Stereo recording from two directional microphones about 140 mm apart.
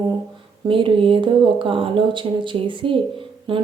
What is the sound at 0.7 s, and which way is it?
Speech, 40° right (ahead or behind).